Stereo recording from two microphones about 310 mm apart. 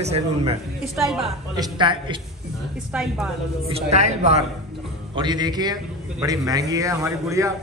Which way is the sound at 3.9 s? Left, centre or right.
Right.